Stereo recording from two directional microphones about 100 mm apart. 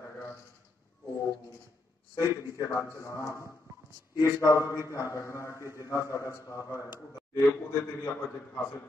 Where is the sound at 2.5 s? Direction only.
30° left (ahead or behind).